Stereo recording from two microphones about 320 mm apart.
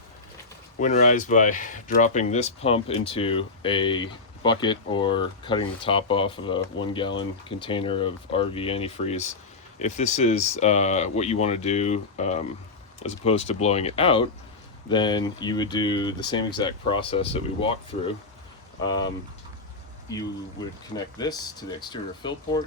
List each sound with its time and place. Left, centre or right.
0.8 s speech: left
18.8 s speech: centre
20.9 s speech: centre